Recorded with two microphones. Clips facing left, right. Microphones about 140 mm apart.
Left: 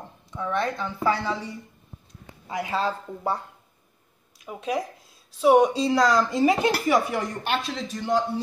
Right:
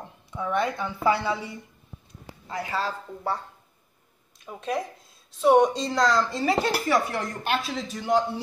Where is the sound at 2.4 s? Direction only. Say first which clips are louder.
Left 3 dB; 20° left (ahead or behind).